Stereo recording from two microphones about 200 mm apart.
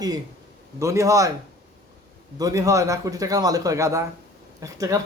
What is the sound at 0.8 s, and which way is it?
Speech, 15° right (ahead or behind).